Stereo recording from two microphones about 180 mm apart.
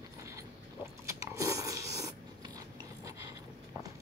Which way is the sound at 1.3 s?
15° right (ahead or behind).